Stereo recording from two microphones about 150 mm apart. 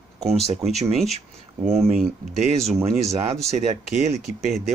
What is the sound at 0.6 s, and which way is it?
Speech, 45° right (ahead or behind).